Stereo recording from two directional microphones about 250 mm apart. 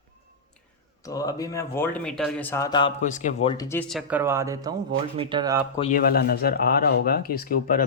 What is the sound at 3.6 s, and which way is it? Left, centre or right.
Speech, centre.